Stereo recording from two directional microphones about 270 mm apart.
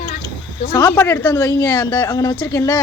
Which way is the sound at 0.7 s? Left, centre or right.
Centre.